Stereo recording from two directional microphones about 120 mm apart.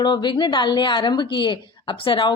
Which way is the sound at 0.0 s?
40° left (ahead or behind).